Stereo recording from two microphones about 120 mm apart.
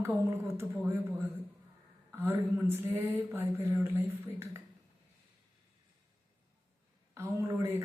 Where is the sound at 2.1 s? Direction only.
20° right (ahead or behind).